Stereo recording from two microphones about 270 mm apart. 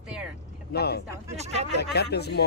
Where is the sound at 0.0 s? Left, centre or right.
Centre.